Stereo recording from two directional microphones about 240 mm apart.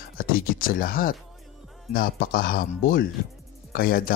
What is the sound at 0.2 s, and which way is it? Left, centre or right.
Speech, left.